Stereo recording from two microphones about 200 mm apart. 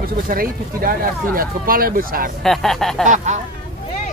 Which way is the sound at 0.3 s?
45° right (ahead or behind).